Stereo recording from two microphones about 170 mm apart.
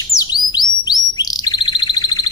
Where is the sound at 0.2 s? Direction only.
25° left (ahead or behind).